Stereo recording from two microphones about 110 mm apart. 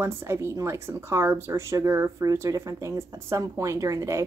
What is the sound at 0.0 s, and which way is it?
Speech, 25° right (ahead or behind).